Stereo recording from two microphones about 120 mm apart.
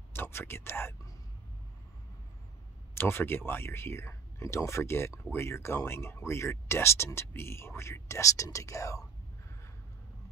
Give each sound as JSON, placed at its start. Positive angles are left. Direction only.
{"t": 0.1, "sound": "speech", "side_deg": 20}
{"t": 2.9, "sound": "speech", "side_deg": 20}